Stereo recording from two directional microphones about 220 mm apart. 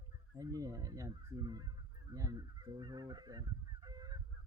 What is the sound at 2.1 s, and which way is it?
Speech, 15° right (ahead or behind).